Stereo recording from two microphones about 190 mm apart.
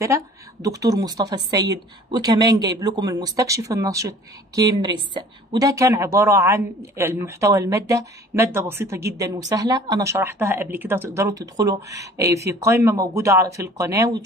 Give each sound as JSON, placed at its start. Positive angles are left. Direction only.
{"t": 0.0, "sound": "a woman's voice", "side_deg": -15}